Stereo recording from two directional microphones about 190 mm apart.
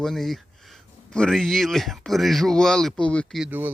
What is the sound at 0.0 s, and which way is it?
Speech, centre (ahead or behind).